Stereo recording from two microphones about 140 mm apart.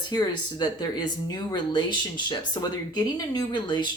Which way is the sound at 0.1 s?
30° left (ahead or behind).